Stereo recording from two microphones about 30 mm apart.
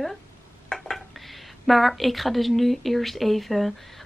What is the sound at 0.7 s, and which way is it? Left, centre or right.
Dishes, left.